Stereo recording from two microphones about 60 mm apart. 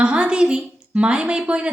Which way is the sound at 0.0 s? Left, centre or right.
Centre.